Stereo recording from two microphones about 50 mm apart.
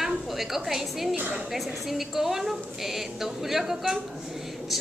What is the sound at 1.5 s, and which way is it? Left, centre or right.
A woman's voice, centre.